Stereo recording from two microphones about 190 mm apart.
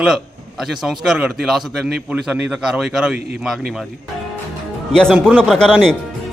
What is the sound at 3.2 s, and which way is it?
Speech, 60° right (ahead or behind).